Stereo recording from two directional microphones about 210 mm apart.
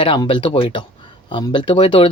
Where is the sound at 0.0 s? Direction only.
25° left (ahead or behind).